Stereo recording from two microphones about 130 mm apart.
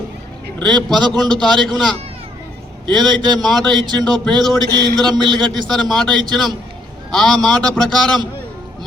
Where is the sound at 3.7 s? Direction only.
35° right (ahead or behind).